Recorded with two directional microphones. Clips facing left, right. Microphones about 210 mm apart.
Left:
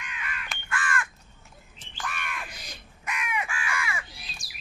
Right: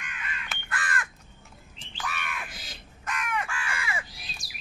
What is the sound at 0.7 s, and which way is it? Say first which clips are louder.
Crow: left 3 dB; 35° right (ahead or behind).